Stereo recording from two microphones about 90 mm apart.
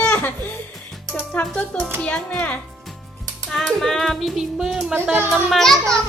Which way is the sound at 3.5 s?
5° left (ahead or behind).